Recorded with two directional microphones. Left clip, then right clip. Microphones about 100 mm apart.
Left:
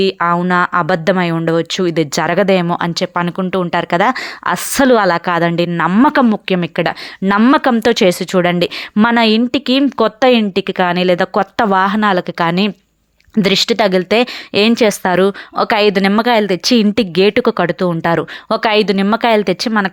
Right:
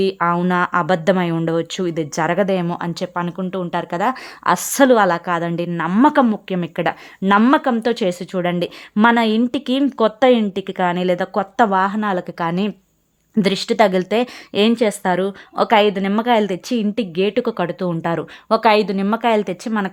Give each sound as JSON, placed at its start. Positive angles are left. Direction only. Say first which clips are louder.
{"t": 0.0, "sound": "a woman's voice", "louder": "left 4 dB", "side_deg": 15}
{"t": 6.7, "sound": "speech", "louder": "left 4 dB", "side_deg": 25}
{"t": 7.5, "sound": "a woman's voice", "louder": "left 5 dB", "side_deg": 45}
{"t": 10.0, "sound": "speech", "louder": "left 1 dB", "side_deg": 30}
{"t": 11.6, "sound": "a woman's voice", "louder": "left 3 dB", "side_deg": 40}
{"t": 12.1, "sound": "a woman's voice", "louder": "left 7 dB", "side_deg": 25}
{"t": 16.7, "sound": "speech", "louder": "left 7 dB", "side_deg": 35}